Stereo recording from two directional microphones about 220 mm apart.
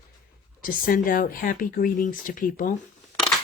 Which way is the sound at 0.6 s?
40° left (ahead or behind).